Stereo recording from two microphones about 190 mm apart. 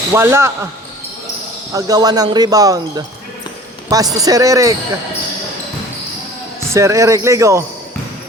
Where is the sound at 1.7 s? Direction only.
20° right (ahead or behind).